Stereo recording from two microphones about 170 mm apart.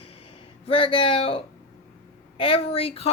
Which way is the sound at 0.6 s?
30° left (ahead or behind).